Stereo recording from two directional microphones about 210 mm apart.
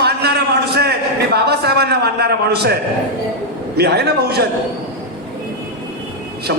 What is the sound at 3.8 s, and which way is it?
Speech, 50° right (ahead or behind).